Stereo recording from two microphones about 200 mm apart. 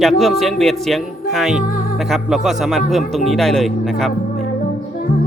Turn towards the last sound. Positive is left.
turn(degrees=0)  # may be behind; listen again after turning